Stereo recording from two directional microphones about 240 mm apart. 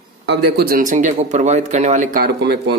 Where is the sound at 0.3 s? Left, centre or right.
Right.